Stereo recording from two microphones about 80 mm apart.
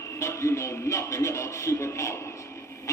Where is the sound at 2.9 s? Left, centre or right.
Left.